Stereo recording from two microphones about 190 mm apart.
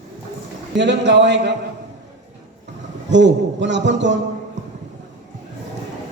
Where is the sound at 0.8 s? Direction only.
65° right (ahead or behind).